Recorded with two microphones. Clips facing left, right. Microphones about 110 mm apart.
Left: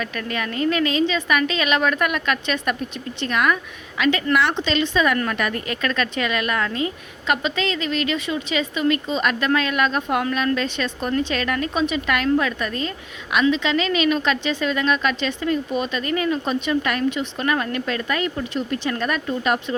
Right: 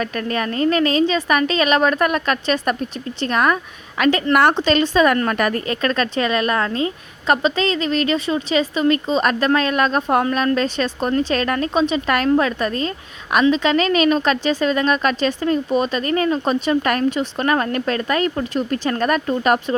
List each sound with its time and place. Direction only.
0.0 s a woman's voice: 40° right (ahead or behind)